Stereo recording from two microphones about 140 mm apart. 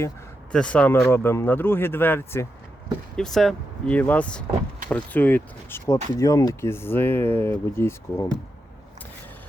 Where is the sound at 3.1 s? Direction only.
5° left (ahead or behind).